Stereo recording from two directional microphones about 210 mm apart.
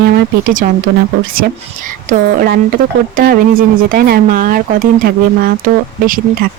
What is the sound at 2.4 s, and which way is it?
Speech, 40° right (ahead or behind).